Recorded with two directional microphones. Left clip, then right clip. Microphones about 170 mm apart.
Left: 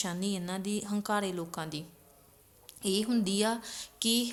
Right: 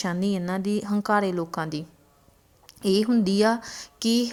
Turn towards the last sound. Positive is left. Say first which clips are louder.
# right 5 dB
turn(degrees=-40)  # may be behind; listen again after turning